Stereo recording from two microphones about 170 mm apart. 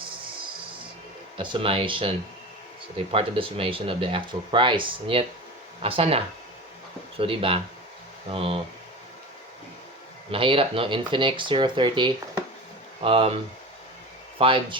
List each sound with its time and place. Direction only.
1.4 s speech: 30° right (ahead or behind)
10.3 s speech: 30° right (ahead or behind)